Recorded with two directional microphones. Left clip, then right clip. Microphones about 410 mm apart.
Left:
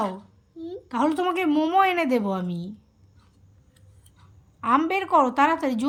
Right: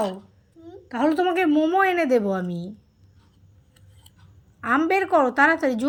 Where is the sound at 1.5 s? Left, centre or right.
Centre.